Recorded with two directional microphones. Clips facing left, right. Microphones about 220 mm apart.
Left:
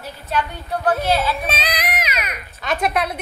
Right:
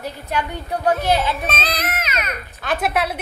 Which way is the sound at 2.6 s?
5° right (ahead or behind).